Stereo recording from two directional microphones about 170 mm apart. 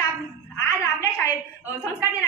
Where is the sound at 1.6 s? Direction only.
15° left (ahead or behind).